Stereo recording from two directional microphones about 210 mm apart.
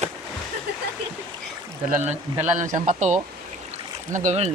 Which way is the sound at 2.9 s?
35° right (ahead or behind).